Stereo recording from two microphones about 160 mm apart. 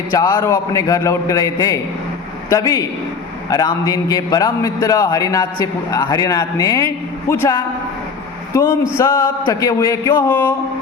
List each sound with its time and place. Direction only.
0.1 s a man's voice: 20° left (ahead or behind)